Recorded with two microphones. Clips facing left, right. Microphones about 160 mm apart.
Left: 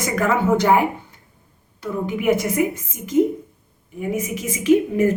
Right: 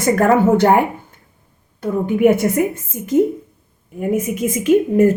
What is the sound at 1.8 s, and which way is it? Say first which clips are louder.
Speech: right 9 dB; 50° right (ahead or behind).